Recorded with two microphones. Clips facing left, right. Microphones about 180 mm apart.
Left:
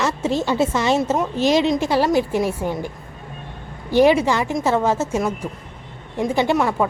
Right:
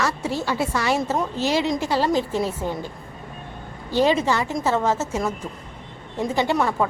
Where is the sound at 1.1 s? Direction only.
15° left (ahead or behind).